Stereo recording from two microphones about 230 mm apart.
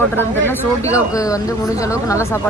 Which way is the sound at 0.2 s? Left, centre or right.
Centre.